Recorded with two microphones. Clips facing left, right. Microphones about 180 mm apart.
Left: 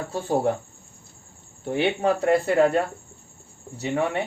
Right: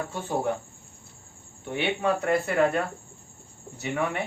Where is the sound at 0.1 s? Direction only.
35° left (ahead or behind).